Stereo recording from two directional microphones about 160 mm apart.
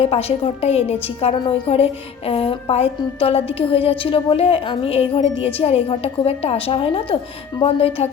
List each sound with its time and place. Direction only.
0.0 s a woman's voice: 40° left (ahead or behind)